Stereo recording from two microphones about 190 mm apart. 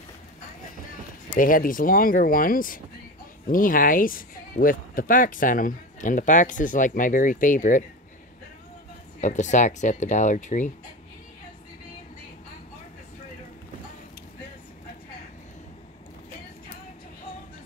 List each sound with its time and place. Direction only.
1.3 s speech: 50° left (ahead or behind)
9.2 s speech: 40° left (ahead or behind)